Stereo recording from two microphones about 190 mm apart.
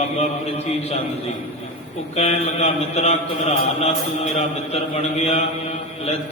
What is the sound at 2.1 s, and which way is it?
A man's voice, 35° left (ahead or behind).